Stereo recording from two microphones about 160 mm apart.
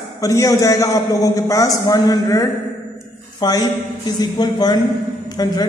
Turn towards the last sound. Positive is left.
turn(degrees=25)  # may be behind; listen again after turning